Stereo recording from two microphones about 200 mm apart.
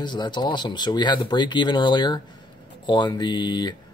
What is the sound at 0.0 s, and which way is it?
Speech, 20° left (ahead or behind).